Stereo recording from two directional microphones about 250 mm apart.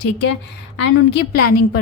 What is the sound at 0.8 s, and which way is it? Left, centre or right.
Speech, left.